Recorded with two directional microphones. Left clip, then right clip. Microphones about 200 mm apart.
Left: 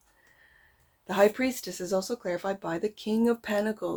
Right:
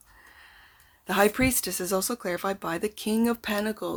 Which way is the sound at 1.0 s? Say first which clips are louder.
Right 1 dB; 25° right (ahead or behind).